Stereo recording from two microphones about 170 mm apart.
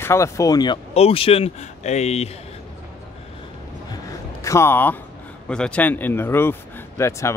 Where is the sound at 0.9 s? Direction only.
35° left (ahead or behind).